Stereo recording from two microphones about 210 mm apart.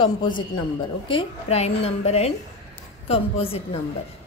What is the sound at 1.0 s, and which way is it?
A woman's voice, 25° left (ahead or behind).